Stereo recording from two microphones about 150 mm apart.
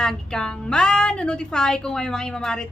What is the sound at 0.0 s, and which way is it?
A woman's voice, 5° left (ahead or behind).